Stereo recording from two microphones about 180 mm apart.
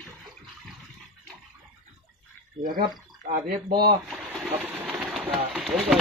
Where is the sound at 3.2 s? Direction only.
60° right (ahead or behind).